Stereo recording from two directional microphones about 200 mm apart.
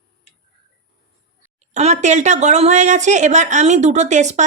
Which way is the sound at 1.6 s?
35° right (ahead or behind).